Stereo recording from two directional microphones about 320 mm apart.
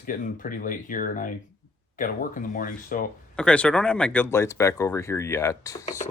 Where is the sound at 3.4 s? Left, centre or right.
Centre.